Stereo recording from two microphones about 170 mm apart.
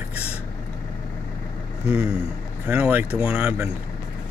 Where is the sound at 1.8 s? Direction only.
5° right (ahead or behind).